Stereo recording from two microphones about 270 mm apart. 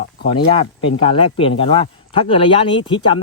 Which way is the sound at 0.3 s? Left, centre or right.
Centre.